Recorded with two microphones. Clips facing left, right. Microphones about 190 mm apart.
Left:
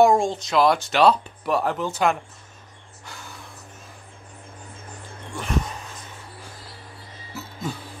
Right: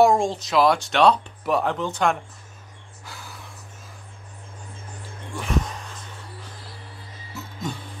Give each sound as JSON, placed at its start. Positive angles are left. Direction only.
{"t": 0.0, "sound": "speech", "side_deg": 0}
{"t": 3.1, "sound": "gasp", "side_deg": 0}
{"t": 5.3, "sound": "speech", "side_deg": 0}